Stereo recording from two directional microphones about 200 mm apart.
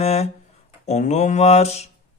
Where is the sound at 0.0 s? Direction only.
30° left (ahead or behind).